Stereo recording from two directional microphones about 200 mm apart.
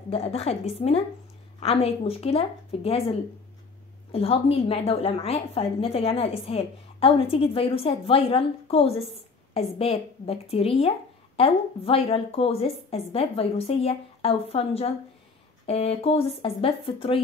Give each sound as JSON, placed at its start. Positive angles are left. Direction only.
{"t": 0.1, "sound": "a woman's voice", "side_deg": 30}